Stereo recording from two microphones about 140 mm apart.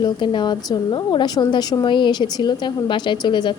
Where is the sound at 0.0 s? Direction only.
30° left (ahead or behind).